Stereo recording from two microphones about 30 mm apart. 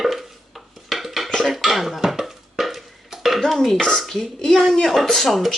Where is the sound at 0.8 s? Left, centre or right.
Centre.